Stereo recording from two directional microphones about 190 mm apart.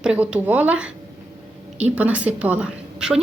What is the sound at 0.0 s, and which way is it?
A woman's voice, 5° right (ahead or behind).